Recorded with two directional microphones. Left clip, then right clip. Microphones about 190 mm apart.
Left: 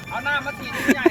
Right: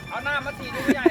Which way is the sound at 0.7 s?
15° right (ahead or behind).